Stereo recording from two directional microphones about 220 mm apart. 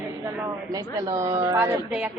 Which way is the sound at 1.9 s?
5° right (ahead or behind).